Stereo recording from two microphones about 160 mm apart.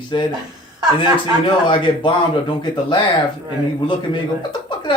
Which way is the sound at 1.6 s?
30° left (ahead or behind).